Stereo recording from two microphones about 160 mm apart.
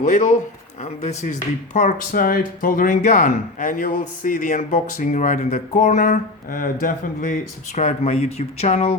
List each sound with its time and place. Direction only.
0.0 s speech: 50° left (ahead or behind)
7.8 s speech: 40° left (ahead or behind)